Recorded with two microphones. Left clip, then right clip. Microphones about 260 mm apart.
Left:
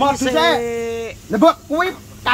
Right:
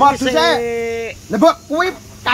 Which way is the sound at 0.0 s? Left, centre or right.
Centre.